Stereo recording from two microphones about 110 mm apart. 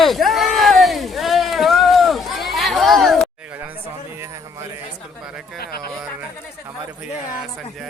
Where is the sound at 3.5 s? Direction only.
15° right (ahead or behind).